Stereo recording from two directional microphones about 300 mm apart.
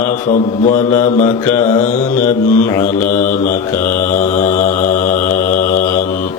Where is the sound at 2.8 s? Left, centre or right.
Left.